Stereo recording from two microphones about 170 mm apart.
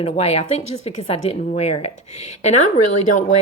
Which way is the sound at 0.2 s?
40° left (ahead or behind).